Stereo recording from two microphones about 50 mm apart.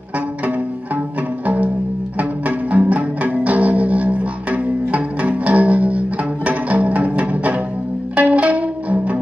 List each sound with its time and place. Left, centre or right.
1.4 s music: right